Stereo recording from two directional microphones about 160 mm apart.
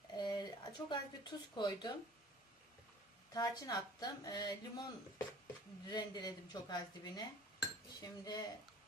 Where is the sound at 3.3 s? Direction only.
25° left (ahead or behind).